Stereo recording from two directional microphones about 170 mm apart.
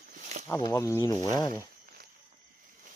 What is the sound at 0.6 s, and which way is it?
Speech, 20° left (ahead or behind).